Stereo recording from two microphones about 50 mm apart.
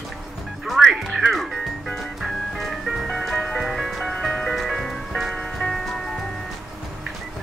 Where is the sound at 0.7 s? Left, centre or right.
Centre.